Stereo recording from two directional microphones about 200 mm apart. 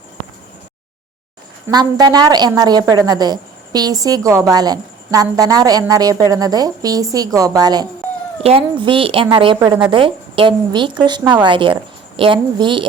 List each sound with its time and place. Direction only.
1.6 s a woman's voice: 20° right (ahead or behind)